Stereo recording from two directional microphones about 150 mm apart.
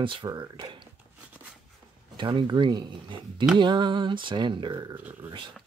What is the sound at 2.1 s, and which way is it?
Speech, 30° right (ahead or behind).